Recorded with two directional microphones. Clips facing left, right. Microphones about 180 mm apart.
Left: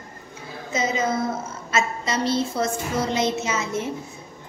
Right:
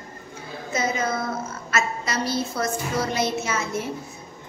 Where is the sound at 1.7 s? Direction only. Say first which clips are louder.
Left 2 dB; 25° left (ahead or behind).